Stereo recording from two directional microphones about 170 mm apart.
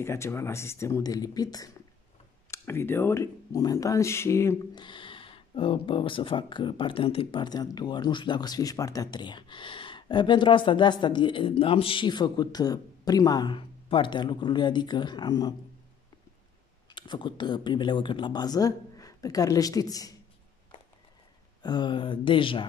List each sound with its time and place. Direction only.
0.0 s speech: 15° left (ahead or behind)
4.8 s speech: 30° left (ahead or behind)
16.9 s speech: 25° left (ahead or behind)
21.6 s speech: 25° left (ahead or behind)